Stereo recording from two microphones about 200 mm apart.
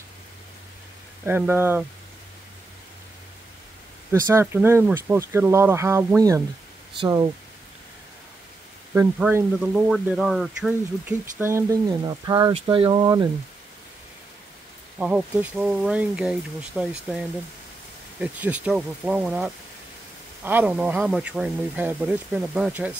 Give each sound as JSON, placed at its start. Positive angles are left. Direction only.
{"t": 1.2, "sound": "speech", "side_deg": -10}
{"t": 4.1, "sound": "speech", "side_deg": -15}
{"t": 8.9, "sound": "speech", "side_deg": -10}
{"t": 15.0, "sound": "speech", "side_deg": -5}
{"t": 18.2, "sound": "speech", "side_deg": -5}